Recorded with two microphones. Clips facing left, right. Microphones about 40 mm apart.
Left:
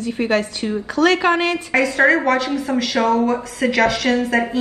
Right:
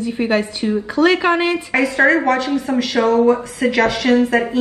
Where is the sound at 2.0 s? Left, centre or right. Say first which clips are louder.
Right 1 dB; centre.